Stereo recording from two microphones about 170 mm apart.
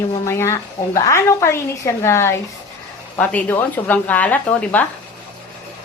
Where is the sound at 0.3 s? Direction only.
15° left (ahead or behind).